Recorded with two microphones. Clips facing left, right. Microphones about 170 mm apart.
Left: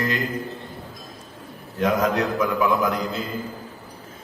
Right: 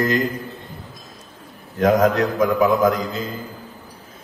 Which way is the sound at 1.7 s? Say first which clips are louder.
Right 5 dB; 45° right (ahead or behind).